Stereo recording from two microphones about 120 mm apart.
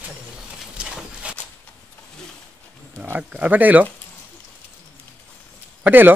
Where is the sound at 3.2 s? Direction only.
10° right (ahead or behind).